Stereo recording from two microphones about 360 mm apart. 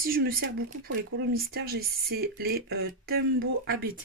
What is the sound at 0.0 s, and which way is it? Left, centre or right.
Speech, right.